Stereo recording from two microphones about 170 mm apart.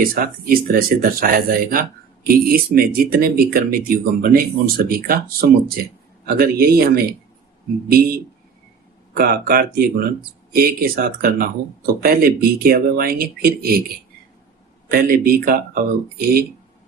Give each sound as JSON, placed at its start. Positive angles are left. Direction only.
{"t": 0.0, "sound": "speech", "side_deg": -55}
{"t": 9.1, "sound": "speech", "side_deg": -60}
{"t": 14.8, "sound": "speech", "side_deg": -60}